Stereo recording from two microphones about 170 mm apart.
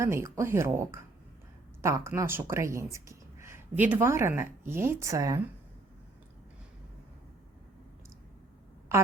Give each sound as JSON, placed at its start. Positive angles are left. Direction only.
{"t": 0.0, "sound": "speech", "side_deg": -15}